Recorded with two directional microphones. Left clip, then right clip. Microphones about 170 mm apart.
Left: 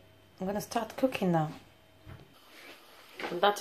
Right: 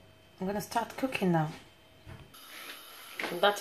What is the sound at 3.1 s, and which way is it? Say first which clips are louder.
Speech: even; centre (ahead or behind).